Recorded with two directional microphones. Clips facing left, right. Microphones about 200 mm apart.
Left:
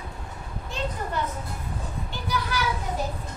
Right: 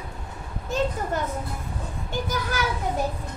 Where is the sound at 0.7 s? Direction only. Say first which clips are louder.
Right 7 dB; 45° right (ahead or behind).